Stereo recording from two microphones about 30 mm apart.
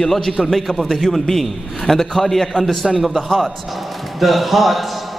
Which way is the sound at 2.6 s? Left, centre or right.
Centre.